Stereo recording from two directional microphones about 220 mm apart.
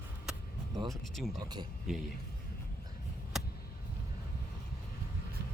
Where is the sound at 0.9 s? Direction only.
Centre (ahead or behind).